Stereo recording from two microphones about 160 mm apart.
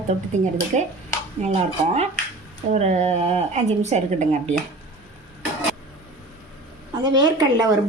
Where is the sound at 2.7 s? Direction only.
45° right (ahead or behind).